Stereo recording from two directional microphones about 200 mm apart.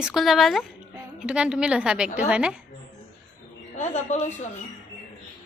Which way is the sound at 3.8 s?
35° left (ahead or behind).